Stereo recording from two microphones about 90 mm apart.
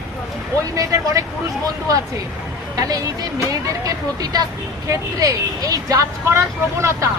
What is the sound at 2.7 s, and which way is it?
A woman's voice, 40° right (ahead or behind).